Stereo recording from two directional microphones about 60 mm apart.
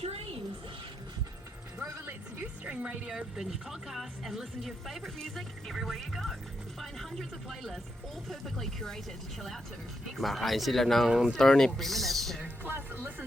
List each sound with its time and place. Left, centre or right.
2.6 s a sound: right
3.1 s speech: centre
10.2 s speech: centre
11.1 s speech: centre
11.3 s speech: centre
12.6 s speech: right